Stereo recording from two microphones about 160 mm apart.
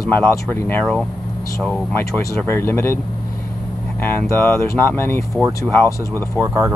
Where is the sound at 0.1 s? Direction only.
10° left (ahead or behind).